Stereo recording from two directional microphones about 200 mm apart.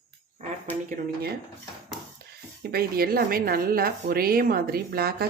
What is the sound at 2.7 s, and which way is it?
A woman's voice, 50° right (ahead or behind).